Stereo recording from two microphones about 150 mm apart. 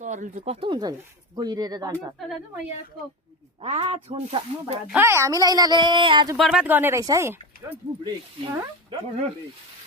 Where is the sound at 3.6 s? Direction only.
40° right (ahead or behind).